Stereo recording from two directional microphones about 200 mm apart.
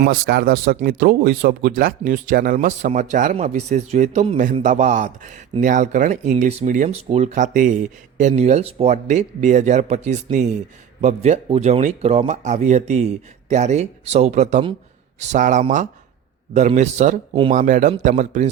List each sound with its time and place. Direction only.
0.0 s speech: 55° right (ahead or behind); by 18.4 s 35° right (ahead or behind)